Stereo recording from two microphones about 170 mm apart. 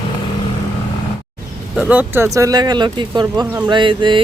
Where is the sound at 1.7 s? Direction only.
10° right (ahead or behind).